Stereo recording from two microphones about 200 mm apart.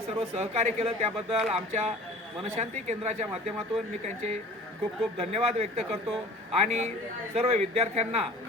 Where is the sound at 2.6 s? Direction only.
35° right (ahead or behind).